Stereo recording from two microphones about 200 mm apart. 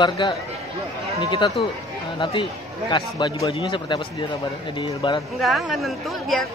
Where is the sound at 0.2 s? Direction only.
25° left (ahead or behind).